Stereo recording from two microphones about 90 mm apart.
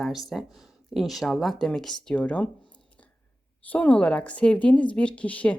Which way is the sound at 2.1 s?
15° left (ahead or behind).